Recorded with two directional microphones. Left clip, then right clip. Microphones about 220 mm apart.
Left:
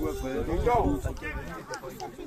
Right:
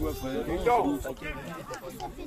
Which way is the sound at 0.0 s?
50° right (ahead or behind).